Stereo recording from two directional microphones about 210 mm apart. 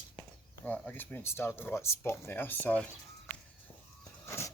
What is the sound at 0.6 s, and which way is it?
Speech, 10° left (ahead or behind).